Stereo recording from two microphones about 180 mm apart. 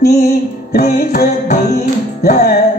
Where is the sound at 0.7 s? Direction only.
60° left (ahead or behind).